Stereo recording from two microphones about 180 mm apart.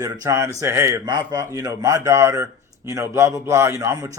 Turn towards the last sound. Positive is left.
turn(degrees=-15)  # may be behind; listen again after turning